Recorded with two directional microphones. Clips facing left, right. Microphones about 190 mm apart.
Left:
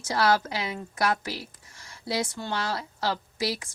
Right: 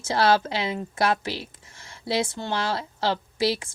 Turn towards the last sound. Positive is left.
turn(degrees=-25)  # may be behind; listen again after turning